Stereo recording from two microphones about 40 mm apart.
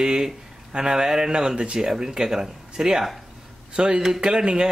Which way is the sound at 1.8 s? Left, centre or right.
Centre.